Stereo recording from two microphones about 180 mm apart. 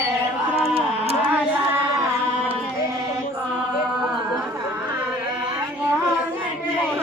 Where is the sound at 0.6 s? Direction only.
35° right (ahead or behind).